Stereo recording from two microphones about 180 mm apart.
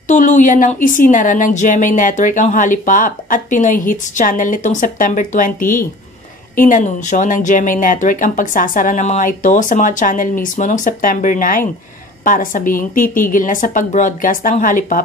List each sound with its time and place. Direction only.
0.1 s speech: 45° left (ahead or behind)